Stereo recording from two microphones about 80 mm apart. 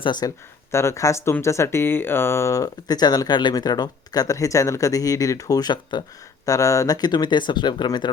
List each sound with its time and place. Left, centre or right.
0.0 s speech: left
0.7 s speech: left
6.4 s speech: left